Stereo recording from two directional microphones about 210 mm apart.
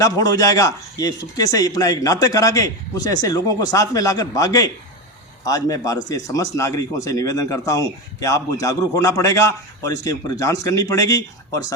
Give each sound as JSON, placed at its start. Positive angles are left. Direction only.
{"t": 0.0, "sound": "speech", "side_deg": 15}